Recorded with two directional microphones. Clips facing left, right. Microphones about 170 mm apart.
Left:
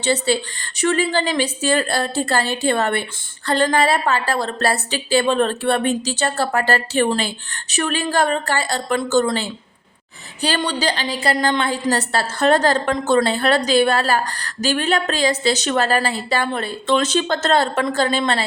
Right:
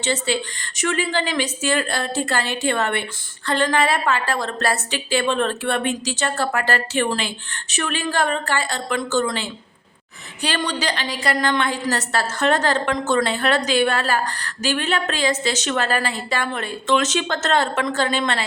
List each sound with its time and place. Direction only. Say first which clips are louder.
0.0 s a woman's voice: left 3 dB; 35° left (ahead or behind)